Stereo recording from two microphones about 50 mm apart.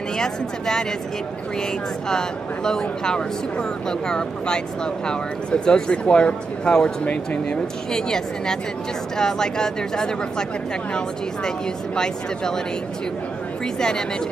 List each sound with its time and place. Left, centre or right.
0.2 s speech: centre
2.0 s speech: centre
13.7 s speech: centre